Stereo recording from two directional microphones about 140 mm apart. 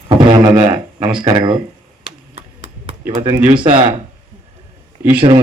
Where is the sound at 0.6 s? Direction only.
35° right (ahead or behind).